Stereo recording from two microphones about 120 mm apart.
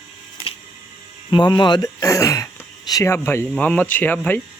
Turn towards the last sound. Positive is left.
turn(degrees=15)  # may be behind; listen again after turning